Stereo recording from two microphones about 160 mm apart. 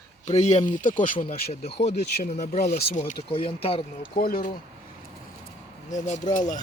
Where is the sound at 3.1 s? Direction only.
30° left (ahead or behind).